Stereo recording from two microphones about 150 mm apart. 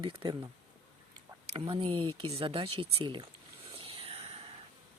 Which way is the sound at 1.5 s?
35° right (ahead or behind).